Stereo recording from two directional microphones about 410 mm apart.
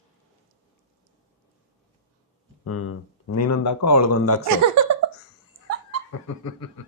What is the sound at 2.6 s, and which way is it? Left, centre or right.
Speech, left.